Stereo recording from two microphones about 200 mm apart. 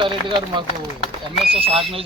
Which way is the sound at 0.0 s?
25° right (ahead or behind).